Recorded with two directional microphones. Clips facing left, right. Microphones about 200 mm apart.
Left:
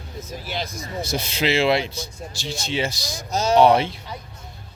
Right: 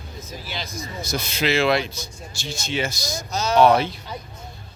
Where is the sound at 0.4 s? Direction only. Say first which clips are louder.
Left 5 dB; 50° left (ahead or behind).